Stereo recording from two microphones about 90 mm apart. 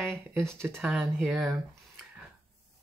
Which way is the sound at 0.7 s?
20° right (ahead or behind).